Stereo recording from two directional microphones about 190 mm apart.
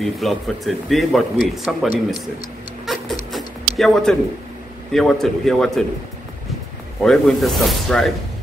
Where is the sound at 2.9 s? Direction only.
Centre (ahead or behind).